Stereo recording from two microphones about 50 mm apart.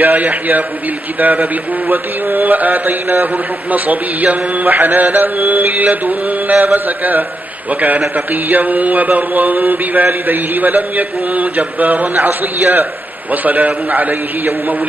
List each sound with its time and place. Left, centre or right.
0.0 s mantra: right
8.5 s mantra: right